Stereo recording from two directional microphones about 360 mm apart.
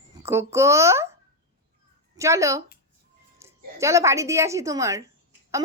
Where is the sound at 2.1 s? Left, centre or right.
Centre.